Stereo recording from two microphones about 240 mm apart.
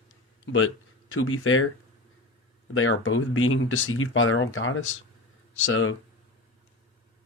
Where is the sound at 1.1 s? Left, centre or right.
Left.